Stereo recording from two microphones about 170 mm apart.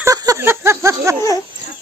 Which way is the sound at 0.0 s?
20° right (ahead or behind).